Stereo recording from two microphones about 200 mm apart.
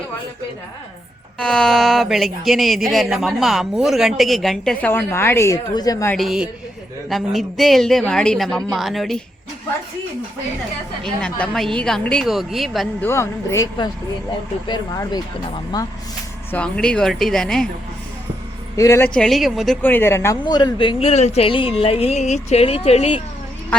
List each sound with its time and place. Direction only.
1.4 s a woman's voice: 5° left (ahead or behind)
6.1 s a woman's voice: centre (ahead or behind)
11.0 s a woman's voice: 5° left (ahead or behind)
13.1 s speech: 15° left (ahead or behind)
16.5 s a woman's voice: 5° left (ahead or behind)
18.8 s speech: 15° left (ahead or behind); by 23.2 s 30° left (ahead or behind)